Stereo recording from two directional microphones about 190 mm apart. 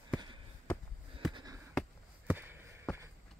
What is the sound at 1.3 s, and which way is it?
Basketball bounce, 20° right (ahead or behind).